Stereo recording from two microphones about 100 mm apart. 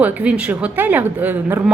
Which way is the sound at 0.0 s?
15° right (ahead or behind).